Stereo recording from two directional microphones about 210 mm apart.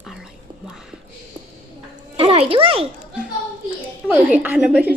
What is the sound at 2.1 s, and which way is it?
Speech, 25° right (ahead or behind).